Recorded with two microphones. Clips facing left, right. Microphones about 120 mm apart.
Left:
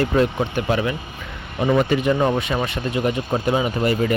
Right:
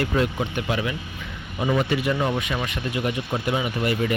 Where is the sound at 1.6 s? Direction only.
65° left (ahead or behind).